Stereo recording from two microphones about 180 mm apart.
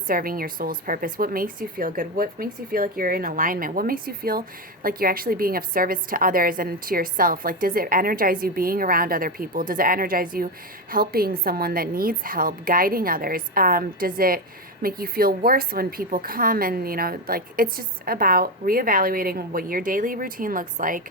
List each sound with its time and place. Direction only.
0.1 s speech: 50° right (ahead or behind)